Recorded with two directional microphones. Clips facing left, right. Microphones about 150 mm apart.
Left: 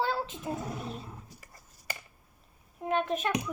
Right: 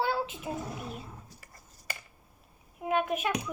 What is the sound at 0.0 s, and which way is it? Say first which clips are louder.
Child singing: right 1 dB; 10° right (ahead or behind).